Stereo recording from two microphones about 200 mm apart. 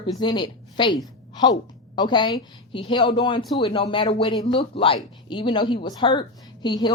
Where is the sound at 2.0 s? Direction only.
20° left (ahead or behind).